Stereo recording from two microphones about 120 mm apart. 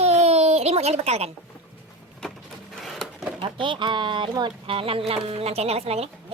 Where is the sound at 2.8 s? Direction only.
5° left (ahead or behind).